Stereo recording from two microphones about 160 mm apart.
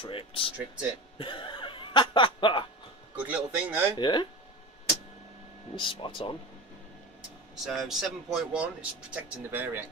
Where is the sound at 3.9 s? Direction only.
30° left (ahead or behind).